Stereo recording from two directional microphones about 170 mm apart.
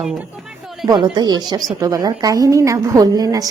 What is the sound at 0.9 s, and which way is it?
A woman's voice, 25° right (ahead or behind).